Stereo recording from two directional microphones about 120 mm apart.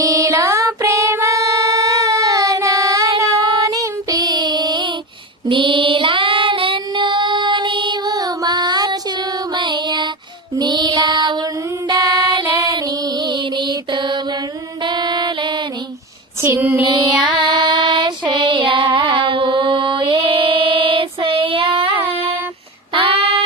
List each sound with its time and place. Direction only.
0.0 s a sound: 25° right (ahead or behind)
5.5 s child singing: 40° right (ahead or behind)
9.6 s music: 40° right (ahead or behind)
12.4 s female singing: 40° right (ahead or behind)
12.6 s mantra: 35° right (ahead or behind)
14.8 s child singing: 40° right (ahead or behind)
16.4 s music: 20° right (ahead or behind)
16.8 s child singing: 40° right (ahead or behind)